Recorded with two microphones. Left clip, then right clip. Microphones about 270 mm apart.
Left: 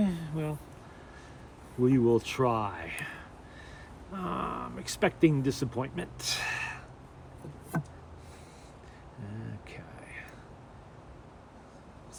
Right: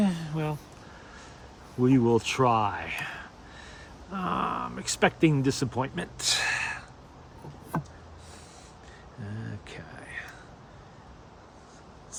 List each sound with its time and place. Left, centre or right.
0.0 s a sound: right
1.8 s speech: right
9.6 s whispering: right